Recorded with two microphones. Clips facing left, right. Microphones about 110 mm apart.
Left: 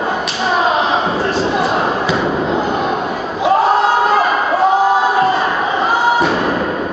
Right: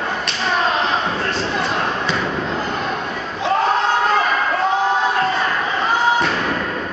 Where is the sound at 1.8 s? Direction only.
5° left (ahead or behind).